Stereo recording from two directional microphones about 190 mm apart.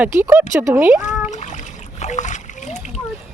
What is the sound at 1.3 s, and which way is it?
Splash, 40° left (ahead or behind).